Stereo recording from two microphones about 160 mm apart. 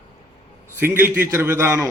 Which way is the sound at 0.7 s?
15° right (ahead or behind).